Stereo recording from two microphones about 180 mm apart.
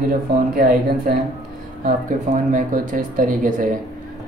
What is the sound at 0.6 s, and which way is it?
Speech, 50° right (ahead or behind).